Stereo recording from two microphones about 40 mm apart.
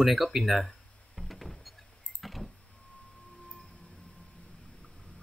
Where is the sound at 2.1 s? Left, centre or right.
Centre.